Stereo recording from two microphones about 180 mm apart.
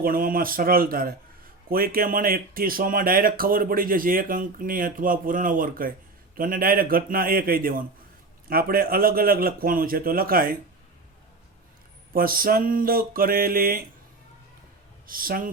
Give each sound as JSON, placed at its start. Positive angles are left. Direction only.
{"t": 0.0, "sound": "speech", "side_deg": -50}
{"t": 12.1, "sound": "speech", "side_deg": -55}
{"t": 15.0, "sound": "speech", "side_deg": -55}